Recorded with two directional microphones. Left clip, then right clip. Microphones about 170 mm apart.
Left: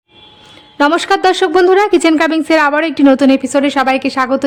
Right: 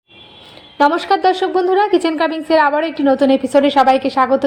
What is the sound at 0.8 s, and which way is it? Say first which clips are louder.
A woman's voice: left 2 dB; 25° left (ahead or behind).